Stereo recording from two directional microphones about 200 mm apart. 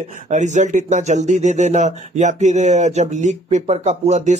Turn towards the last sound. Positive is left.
turn(degrees=-35)  # may be behind; listen again after turning